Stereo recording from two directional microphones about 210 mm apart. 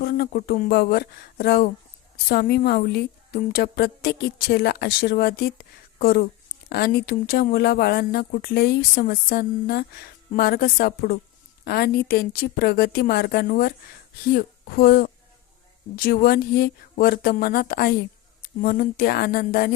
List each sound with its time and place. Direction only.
0.0 s a woman's voice: 45° left (ahead or behind)